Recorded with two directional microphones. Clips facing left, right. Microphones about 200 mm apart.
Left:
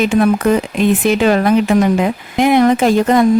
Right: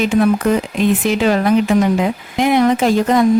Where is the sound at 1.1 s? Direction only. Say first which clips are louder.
Left 3 dB; 60° left (ahead or behind).